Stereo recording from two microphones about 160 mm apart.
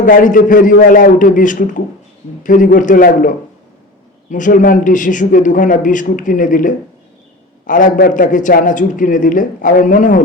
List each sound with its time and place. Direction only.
0.0 s a man's voice: 55° left (ahead or behind)